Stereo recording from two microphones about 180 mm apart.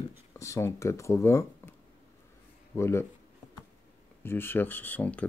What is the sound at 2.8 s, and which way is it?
Speech, 15° left (ahead or behind).